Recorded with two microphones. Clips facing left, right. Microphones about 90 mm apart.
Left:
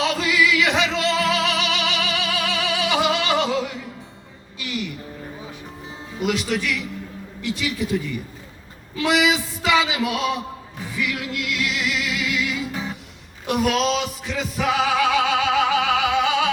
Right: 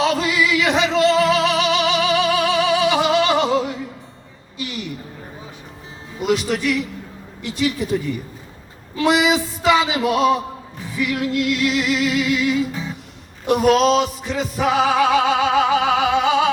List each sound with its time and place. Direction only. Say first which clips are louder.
0.0 s music: right 2 dB; 30° right (ahead or behind)
6.2 s music: right 4 dB; 35° right (ahead or behind)
9.0 s a sound: right 3 dB; 35° right (ahead or behind)
11.0 s music: right 7 dB; 35° right (ahead or behind)